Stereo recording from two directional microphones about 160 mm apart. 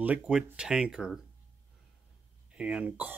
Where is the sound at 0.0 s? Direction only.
5° right (ahead or behind).